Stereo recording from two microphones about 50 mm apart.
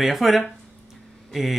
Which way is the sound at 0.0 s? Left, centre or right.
Centre.